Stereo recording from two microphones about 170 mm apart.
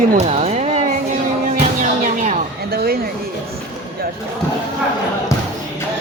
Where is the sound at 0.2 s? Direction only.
40° right (ahead or behind).